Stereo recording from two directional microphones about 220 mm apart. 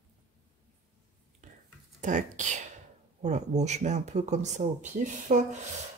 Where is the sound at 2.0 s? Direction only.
35° right (ahead or behind).